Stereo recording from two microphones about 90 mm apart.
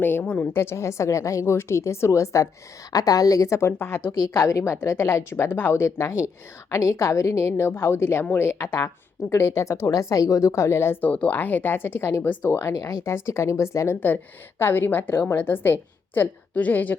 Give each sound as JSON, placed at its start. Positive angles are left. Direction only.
{"t": 0.0, "sound": "a woman's voice", "side_deg": 20}
{"t": 11.1, "sound": "speech", "side_deg": 20}